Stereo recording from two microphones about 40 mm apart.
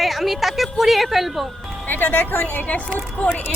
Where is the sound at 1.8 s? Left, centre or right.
Left.